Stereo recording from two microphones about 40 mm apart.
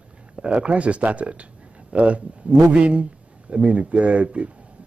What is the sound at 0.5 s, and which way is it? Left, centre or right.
A man's voice, right.